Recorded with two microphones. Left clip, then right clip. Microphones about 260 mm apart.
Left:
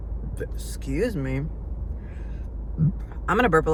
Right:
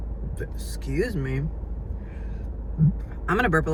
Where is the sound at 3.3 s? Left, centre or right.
Centre.